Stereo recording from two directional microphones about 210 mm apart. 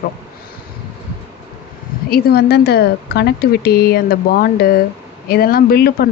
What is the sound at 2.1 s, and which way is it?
Speech, 50° left (ahead or behind).